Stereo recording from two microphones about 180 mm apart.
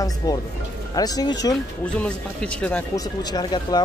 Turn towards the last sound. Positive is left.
turn(degrees=20)  # may be behind; listen again after turning